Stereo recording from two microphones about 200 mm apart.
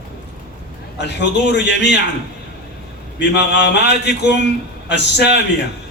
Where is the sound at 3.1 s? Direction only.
60° left (ahead or behind).